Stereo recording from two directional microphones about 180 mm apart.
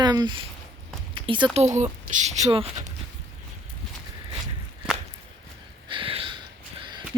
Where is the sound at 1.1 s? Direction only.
30° right (ahead or behind).